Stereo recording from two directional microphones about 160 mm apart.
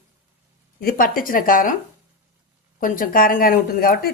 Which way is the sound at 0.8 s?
65° left (ahead or behind).